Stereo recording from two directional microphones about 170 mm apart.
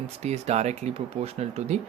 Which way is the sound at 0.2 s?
40° right (ahead or behind).